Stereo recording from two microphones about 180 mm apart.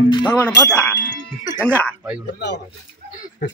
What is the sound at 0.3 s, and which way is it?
Speech, 5° left (ahead or behind).